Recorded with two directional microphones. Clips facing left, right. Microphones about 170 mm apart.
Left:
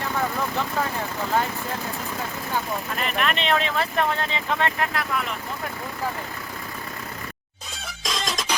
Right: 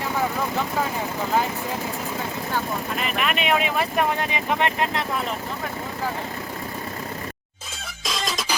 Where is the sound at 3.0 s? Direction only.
5° right (ahead or behind); by 5.2 s 25° right (ahead or behind).